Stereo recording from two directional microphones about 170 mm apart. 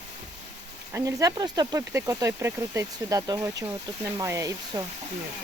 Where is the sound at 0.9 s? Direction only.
20° right (ahead or behind).